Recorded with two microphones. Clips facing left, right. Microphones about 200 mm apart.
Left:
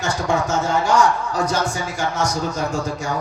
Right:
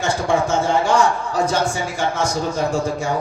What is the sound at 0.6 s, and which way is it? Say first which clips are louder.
A man's voice: right 1 dB; 30° right (ahead or behind).